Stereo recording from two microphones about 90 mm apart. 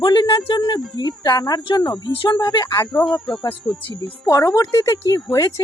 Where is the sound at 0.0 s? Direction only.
55° left (ahead or behind).